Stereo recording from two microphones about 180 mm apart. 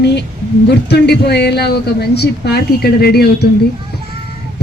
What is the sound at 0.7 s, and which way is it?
Speech, 65° left (ahead or behind).